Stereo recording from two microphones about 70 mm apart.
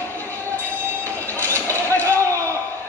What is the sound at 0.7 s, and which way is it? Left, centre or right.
Train, left.